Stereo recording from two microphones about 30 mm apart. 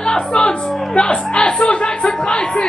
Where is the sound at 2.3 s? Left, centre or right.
Left.